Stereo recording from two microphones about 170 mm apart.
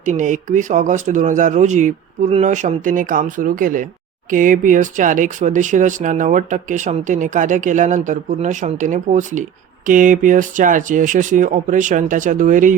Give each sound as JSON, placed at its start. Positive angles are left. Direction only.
{"t": 0.0, "sound": "speech", "side_deg": -45}